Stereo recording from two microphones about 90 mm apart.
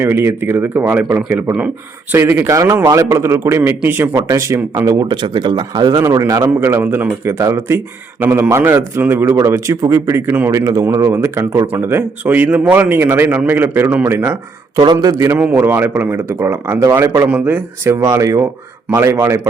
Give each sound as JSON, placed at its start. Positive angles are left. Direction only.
{"t": 0.0, "sound": "a man's voice", "side_deg": -25}
{"t": 2.1, "sound": "a man's voice", "side_deg": -30}
{"t": 4.1, "sound": "speech", "side_deg": -35}
{"t": 5.0, "sound": "speech", "side_deg": -55}
{"t": 6.0, "sound": "speech", "side_deg": -35}
{"t": 6.5, "sound": "a man's voice", "side_deg": -30}
{"t": 9.4, "sound": "speech", "side_deg": -35}
{"t": 10.2, "sound": "a man's voice", "side_deg": -25}
{"t": 10.5, "sound": "a man's voice", "side_deg": -35}
{"t": 14.9, "sound": "speech", "side_deg": -40}
{"t": 15.3, "sound": "a man's voice", "side_deg": -20}
{"t": 17.2, "sound": "a man's voice", "side_deg": -20}
{"t": 18.0, "sound": "speech", "side_deg": -35}